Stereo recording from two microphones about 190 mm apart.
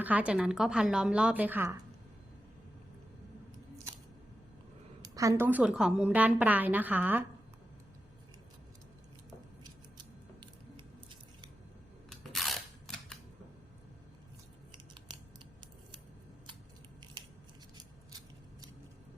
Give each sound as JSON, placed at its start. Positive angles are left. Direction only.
{"t": 0.0, "sound": "a woman's voice", "side_deg": -5}
{"t": 5.0, "sound": "a woman's voice", "side_deg": -15}
{"t": 10.0, "sound": "squish", "side_deg": -25}
{"t": 12.1, "sound": "a sound", "side_deg": 0}